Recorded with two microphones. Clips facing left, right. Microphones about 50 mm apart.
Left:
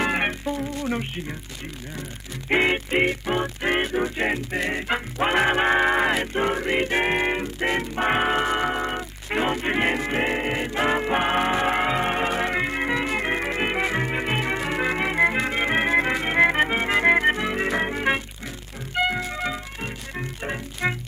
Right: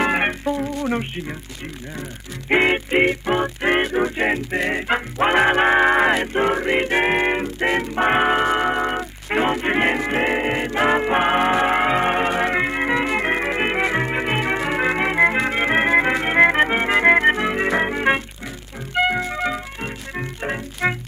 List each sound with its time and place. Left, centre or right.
0.0 s music: centre
2.5 s music: centre